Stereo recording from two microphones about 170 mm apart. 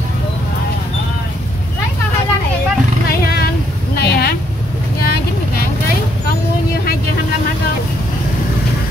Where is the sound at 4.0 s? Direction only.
65° left (ahead or behind).